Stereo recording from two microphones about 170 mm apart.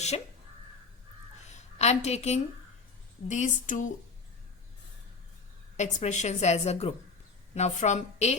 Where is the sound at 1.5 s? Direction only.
40° left (ahead or behind).